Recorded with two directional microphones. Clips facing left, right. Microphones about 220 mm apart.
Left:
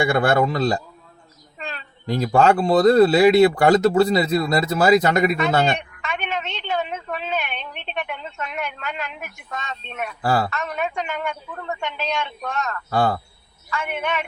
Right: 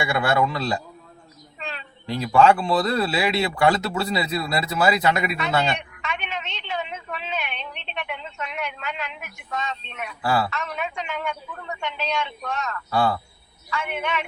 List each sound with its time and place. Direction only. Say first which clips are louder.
0.0 s speech: left 4 dB; 45° left (ahead or behind)